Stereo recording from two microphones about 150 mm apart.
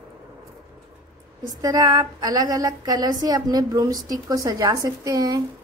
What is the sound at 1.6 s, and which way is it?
A woman's voice, 25° right (ahead or behind).